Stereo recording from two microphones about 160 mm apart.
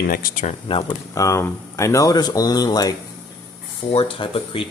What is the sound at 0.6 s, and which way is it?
Speech, 35° left (ahead or behind).